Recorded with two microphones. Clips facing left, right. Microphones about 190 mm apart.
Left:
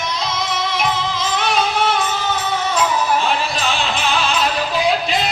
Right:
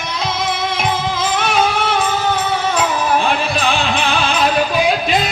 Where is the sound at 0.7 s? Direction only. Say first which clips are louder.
Right 2 dB; 55° right (ahead or behind).